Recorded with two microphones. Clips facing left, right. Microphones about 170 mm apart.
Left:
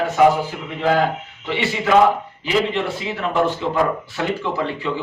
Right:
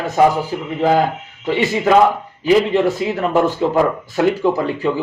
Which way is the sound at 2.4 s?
45° right (ahead or behind).